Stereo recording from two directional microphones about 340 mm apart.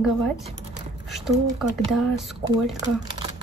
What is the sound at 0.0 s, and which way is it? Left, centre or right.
Speech, centre.